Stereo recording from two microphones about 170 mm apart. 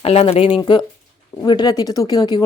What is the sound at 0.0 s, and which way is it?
A woman's voice, 35° left (ahead or behind).